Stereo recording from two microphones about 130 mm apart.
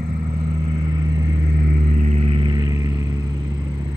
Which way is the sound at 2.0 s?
55° right (ahead or behind).